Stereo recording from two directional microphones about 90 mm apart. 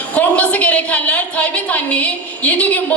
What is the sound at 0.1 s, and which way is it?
A woman's voice, 15° left (ahead or behind).